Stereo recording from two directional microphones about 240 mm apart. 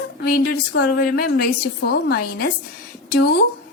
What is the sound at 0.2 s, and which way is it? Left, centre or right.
A woman's voice, left.